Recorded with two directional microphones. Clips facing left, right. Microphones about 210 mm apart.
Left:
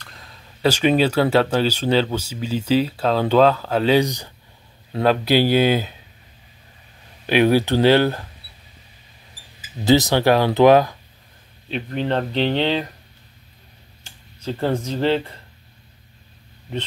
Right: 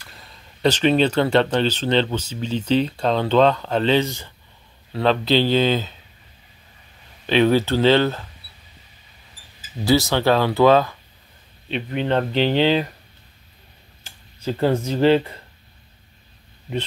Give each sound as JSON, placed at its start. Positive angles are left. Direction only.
{"t": 0.0, "sound": "speech", "side_deg": 0}
{"t": 7.2, "sound": "speech", "side_deg": 10}
{"t": 9.8, "sound": "speech", "side_deg": 20}
{"t": 11.7, "sound": "speech", "side_deg": 0}
{"t": 14.4, "sound": "speech", "side_deg": -5}